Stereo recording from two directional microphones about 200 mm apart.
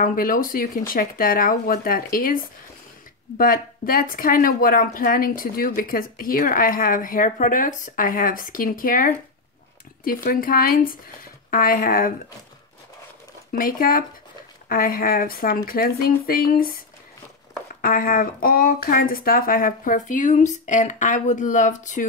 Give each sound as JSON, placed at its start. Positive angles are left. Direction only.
{"t": 0.0, "sound": "speech", "side_deg": 45}
{"t": 13.5, "sound": "speech", "side_deg": 45}
{"t": 17.8, "sound": "speech", "side_deg": 45}